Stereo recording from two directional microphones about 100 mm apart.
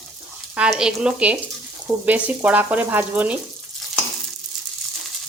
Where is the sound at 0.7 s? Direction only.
10° right (ahead or behind).